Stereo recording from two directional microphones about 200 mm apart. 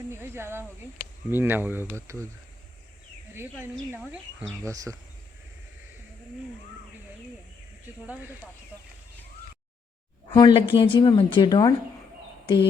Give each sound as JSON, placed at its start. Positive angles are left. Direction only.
{"t": 0.1, "sound": "cricket", "side_deg": -10}
{"t": 1.3, "sound": "speech", "side_deg": -10}
{"t": 3.3, "sound": "speech", "side_deg": -10}
{"t": 8.0, "sound": "speech", "side_deg": -5}
{"t": 10.3, "sound": "speech", "side_deg": 25}